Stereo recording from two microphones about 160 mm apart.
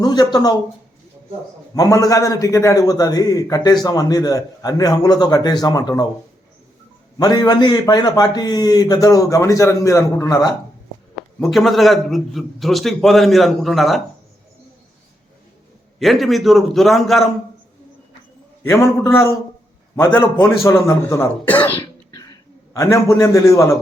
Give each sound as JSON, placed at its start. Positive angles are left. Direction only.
{"t": 0.0, "sound": "a man's voice", "side_deg": 25}
{"t": 1.7, "sound": "a man's voice", "side_deg": 20}
{"t": 7.2, "sound": "a man's voice", "side_deg": 25}
{"t": 11.3, "sound": "a man's voice", "side_deg": 0}
{"t": 16.0, "sound": "a man's voice", "side_deg": 0}
{"t": 18.6, "sound": "speech", "side_deg": 15}
{"t": 21.8, "sound": "a sound", "side_deg": 25}